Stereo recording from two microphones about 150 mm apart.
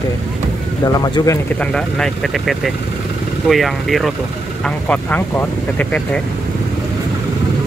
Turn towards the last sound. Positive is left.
turn(degrees=10)  # may be behind; listen again after turning